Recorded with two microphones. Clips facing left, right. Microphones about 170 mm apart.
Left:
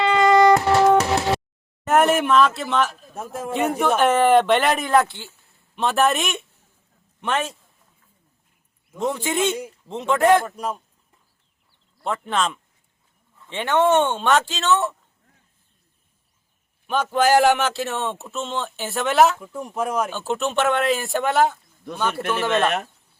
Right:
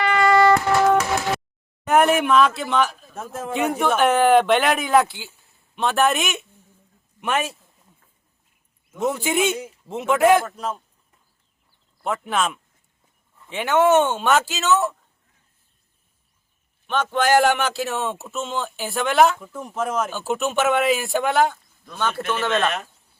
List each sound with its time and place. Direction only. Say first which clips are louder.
0.0 s music: left 2 dB; 20° left (ahead or behind)
0.6 s music: left 2 dB; 30° left (ahead or behind)
1.8 s a man's voice: even; centre (ahead or behind)
9.0 s a man's voice: right 1 dB; 5° right (ahead or behind)
10.4 s speech: left 1 dB; 10° left (ahead or behind)
12.0 s a man's voice: even; 5° right (ahead or behind)
16.8 s speech: left 2 dB; 5° left (ahead or behind)
20.1 s speech: even; 5° right (ahead or behind)